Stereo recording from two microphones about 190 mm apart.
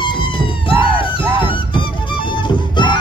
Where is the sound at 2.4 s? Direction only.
25° left (ahead or behind).